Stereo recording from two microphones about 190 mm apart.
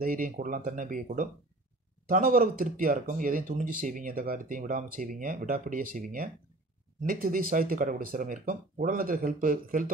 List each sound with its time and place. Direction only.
0.0 s speech: 45° right (ahead or behind)